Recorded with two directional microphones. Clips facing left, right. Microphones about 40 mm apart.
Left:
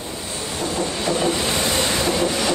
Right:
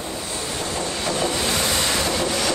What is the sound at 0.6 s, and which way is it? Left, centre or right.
Train, left.